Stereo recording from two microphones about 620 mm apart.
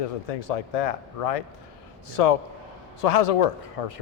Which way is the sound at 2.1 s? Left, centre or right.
Left.